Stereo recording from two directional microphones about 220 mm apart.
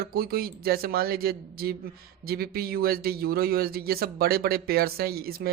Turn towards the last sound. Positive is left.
turn(degrees=-45)  # may be behind; listen again after turning